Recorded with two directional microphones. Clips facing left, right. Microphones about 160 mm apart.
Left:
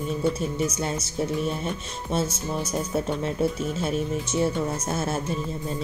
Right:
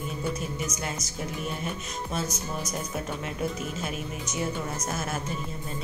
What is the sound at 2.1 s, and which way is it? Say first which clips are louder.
Speech: left 6 dB; 30° left (ahead or behind).